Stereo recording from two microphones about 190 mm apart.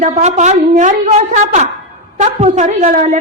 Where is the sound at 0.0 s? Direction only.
35° right (ahead or behind).